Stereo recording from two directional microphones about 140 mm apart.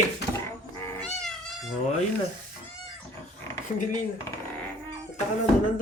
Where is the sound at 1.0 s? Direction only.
5° left (ahead or behind).